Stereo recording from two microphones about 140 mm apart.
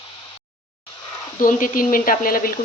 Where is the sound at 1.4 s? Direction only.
70° left (ahead or behind); by 2.5 s 90° left.